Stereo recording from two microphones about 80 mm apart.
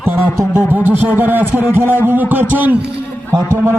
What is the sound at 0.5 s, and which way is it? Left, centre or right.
A man's voice, right.